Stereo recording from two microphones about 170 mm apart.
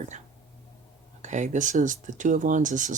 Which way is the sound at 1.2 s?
45° right (ahead or behind).